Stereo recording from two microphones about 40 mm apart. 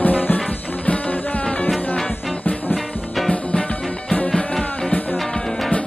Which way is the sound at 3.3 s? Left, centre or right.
Left.